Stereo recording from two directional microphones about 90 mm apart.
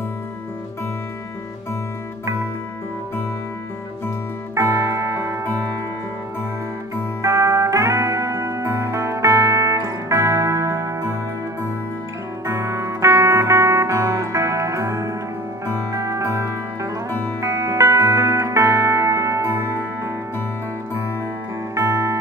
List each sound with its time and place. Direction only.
4.6 s music: 35° right (ahead or behind)
7.2 s music: 35° right (ahead or behind)
12.5 s music: 35° right (ahead or behind)
21.7 s music: 35° right (ahead or behind)